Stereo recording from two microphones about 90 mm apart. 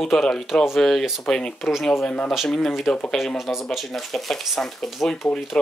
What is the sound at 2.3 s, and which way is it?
Speech, centre (ahead or behind).